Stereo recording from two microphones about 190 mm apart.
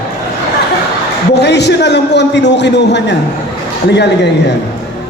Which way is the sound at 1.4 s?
60° left (ahead or behind).